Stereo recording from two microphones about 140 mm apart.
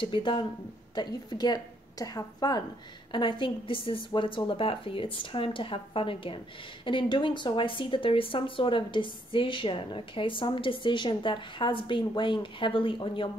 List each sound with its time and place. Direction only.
0.0 s a woman's voice: 35° left (ahead or behind)